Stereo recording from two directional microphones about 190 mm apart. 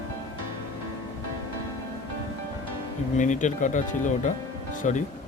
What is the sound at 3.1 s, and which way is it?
Speech, 40° left (ahead or behind).